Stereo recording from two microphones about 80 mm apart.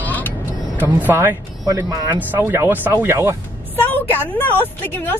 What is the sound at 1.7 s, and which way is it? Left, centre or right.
Speech, right.